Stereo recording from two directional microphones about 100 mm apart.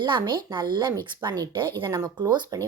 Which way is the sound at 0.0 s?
50° right (ahead or behind).